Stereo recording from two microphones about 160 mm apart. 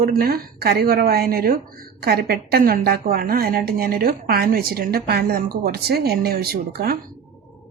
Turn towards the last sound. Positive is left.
turn(degrees=-70)  # may be behind; listen again after turning